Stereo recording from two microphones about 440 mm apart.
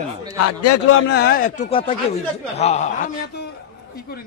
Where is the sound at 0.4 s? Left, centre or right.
Left; by 2.9 s centre.